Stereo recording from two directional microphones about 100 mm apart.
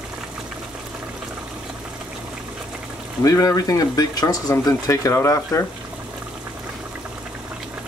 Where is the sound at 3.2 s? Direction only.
35° left (ahead or behind).